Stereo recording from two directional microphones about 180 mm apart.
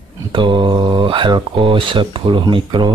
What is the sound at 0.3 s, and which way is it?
Speech, 25° right (ahead or behind).